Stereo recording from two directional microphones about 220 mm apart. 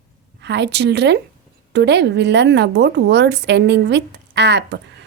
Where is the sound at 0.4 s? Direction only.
50° right (ahead or behind).